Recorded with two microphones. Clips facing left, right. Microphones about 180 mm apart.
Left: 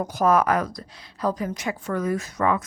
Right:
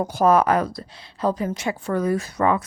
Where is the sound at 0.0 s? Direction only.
30° right (ahead or behind).